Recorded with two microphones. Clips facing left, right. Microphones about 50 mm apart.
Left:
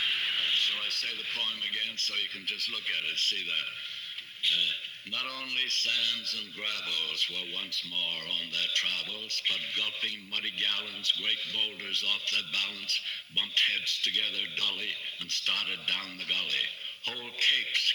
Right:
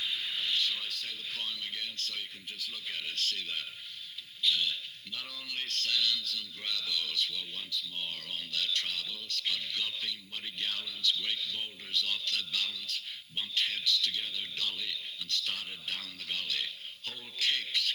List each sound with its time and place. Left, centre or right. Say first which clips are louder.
0.0 s speech: left 5 dB; left
5.1 s a man's voice: left 6 dB; left
12.9 s a man's voice: left 5 dB; left